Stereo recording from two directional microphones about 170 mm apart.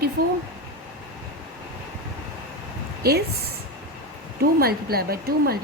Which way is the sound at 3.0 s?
65° right (ahead or behind).